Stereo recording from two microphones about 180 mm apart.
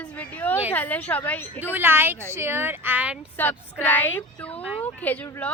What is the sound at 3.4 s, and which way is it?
Speech, 10° left (ahead or behind).